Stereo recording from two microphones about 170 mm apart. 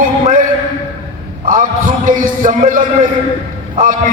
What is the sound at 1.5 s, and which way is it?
A man's voice, 50° right (ahead or behind).